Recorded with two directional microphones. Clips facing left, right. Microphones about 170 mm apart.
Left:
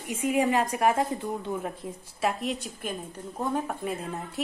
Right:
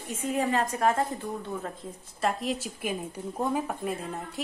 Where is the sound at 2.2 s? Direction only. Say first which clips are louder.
Even; centre (ahead or behind).